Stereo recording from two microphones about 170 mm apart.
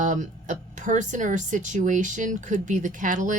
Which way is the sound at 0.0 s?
45° right (ahead or behind).